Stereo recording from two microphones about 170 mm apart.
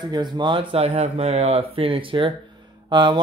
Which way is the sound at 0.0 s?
25° right (ahead or behind).